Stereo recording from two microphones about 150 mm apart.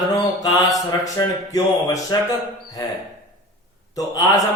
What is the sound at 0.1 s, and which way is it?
Speech, 25° left (ahead or behind).